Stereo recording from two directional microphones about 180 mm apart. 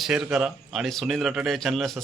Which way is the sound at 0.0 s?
5° right (ahead or behind).